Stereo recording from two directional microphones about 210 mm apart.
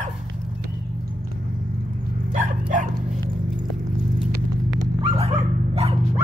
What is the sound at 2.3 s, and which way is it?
Dog, 35° right (ahead or behind).